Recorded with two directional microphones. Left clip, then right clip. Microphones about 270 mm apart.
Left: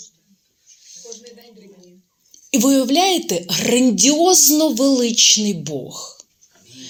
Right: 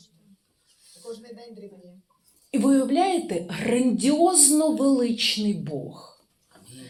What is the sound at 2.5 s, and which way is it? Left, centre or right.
A woman's voice, left.